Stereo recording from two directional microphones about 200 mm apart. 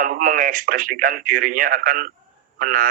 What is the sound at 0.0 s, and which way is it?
Speech, 45° right (ahead or behind).